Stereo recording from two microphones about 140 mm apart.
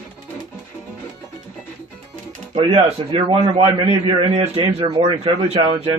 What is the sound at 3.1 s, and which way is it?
A man's voice, 40° right (ahead or behind).